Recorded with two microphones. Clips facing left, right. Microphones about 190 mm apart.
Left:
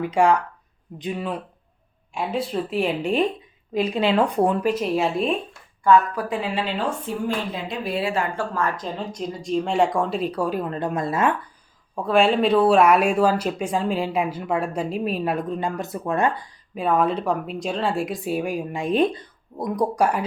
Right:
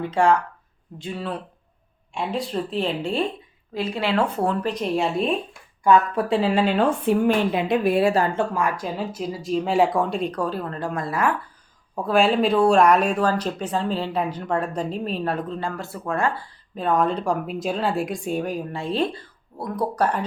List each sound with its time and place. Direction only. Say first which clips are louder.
0.0 s speech: left 1 dB; 15° left (ahead or behind)
2.1 s speech: left 1 dB; centre (ahead or behind)
6.1 s speech: right 5 dB; 30° right (ahead or behind)
8.4 s speech: right 2 dB; 15° right (ahead or behind); by 11.3 s 25° left (ahead or behind)
12.0 s speech: left 1 dB; centre (ahead or behind)